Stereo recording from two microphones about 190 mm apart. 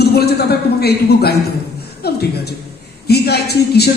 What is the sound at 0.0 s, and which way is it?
A man's voice, 55° left (ahead or behind).